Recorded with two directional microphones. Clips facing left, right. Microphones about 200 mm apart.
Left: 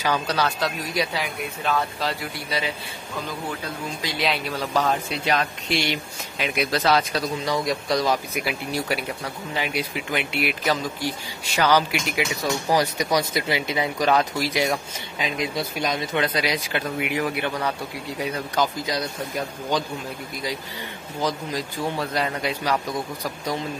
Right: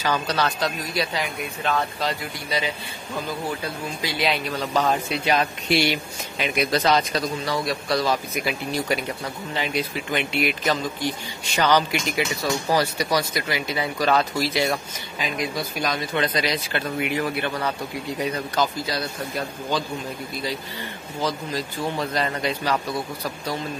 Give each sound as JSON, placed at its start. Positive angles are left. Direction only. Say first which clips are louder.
{"t": 0.0, "sound": "speech", "louder": "even", "side_deg": 10}
{"t": 4.0, "sound": "speech", "louder": "right 2 dB", "side_deg": 0}
{"t": 4.8, "sound": "speech", "louder": "right 1 dB", "side_deg": -5}
{"t": 7.4, "sound": "speech", "louder": "left 1 dB", "side_deg": 15}
{"t": 8.4, "sound": "speech", "louder": "right 1 dB", "side_deg": 5}
{"t": 16.2, "sound": "speech", "louder": "even", "side_deg": 10}
{"t": 18.5, "sound": "speech", "louder": "even", "side_deg": 15}
{"t": 21.2, "sound": "speech", "louder": "even", "side_deg": 15}